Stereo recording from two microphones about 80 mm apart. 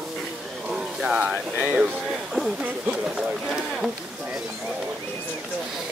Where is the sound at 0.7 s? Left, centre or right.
Centre.